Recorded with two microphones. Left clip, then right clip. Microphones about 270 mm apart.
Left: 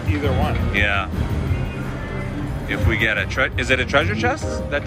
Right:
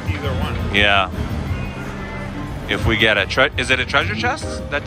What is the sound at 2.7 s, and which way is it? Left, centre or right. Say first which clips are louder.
Speech: right 4 dB; centre.